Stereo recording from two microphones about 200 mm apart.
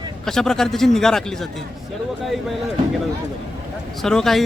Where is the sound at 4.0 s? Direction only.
Centre (ahead or behind).